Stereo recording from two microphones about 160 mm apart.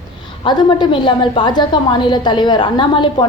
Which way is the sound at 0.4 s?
30° left (ahead or behind).